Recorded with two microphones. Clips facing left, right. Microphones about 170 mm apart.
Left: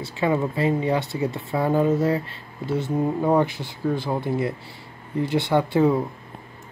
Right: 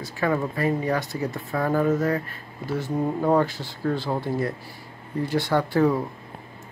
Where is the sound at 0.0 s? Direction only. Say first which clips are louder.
Left 2 dB; 20° left (ahead or behind).